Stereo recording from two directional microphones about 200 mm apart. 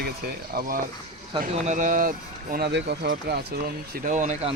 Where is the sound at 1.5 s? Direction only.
35° right (ahead or behind); by 3.4 s 55° right (ahead or behind).